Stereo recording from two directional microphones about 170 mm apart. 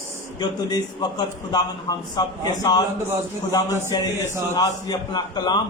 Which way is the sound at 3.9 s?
25° left (ahead or behind).